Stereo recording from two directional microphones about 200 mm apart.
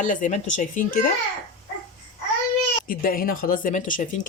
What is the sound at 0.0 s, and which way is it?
Speech, 40° left (ahead or behind).